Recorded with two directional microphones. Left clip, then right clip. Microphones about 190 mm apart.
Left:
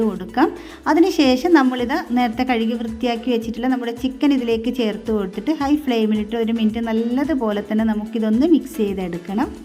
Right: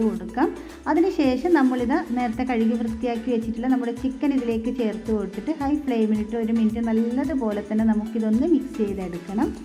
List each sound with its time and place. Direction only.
0.3 s a woman's voice: 50° left (ahead or behind)